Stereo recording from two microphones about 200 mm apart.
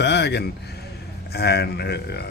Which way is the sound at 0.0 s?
55° left (ahead or behind).